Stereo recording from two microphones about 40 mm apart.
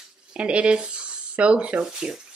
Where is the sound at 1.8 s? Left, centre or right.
Centre.